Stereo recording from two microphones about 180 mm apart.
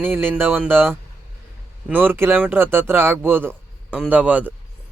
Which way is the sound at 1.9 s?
10° right (ahead or behind).